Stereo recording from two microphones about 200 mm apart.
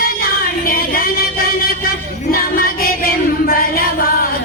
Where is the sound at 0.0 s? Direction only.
45° left (ahead or behind).